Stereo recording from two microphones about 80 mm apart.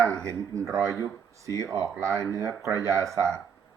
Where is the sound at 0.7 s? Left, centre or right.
Right.